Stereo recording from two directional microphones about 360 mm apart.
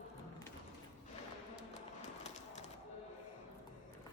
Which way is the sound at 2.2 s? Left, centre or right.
Centre.